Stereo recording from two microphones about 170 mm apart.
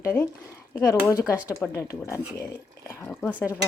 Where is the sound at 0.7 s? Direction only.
20° left (ahead or behind).